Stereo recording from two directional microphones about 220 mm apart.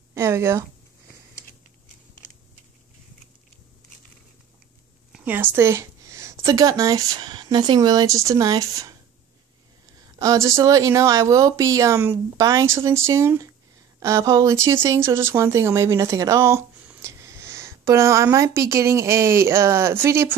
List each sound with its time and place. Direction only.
0.1 s a sound: 10° right (ahead or behind)
5.1 s a woman's voice: 10° right (ahead or behind)
10.1 s speech: 15° right (ahead or behind)